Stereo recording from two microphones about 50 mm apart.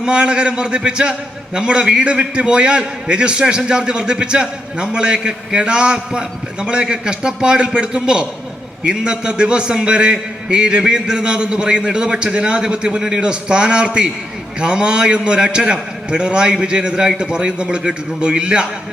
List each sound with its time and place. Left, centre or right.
0.0 s a man's voice: centre